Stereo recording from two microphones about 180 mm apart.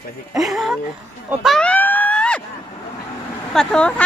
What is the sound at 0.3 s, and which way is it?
Speech, centre (ahead or behind).